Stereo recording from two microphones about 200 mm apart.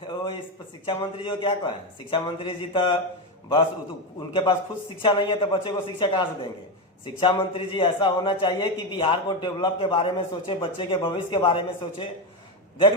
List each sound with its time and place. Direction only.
0.9 s a man's voice: 25° left (ahead or behind)
4.3 s a man's voice: 25° left (ahead or behind)